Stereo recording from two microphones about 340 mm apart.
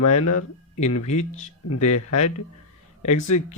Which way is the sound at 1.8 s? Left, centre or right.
Left.